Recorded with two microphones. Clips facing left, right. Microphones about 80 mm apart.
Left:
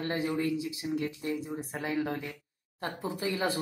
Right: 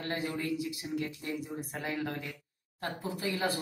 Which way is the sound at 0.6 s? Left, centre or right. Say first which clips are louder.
Left 3 dB; left.